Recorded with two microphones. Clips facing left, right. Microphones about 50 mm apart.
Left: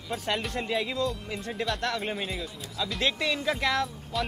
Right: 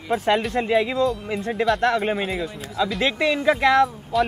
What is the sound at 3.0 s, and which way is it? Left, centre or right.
Speech, right.